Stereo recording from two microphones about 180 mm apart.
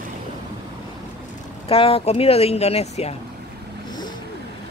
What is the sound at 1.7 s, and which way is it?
Speech, 30° left (ahead or behind).